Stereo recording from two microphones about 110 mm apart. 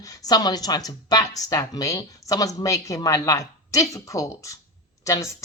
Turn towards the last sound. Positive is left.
turn(degrees=30)  # may be behind; listen again after turning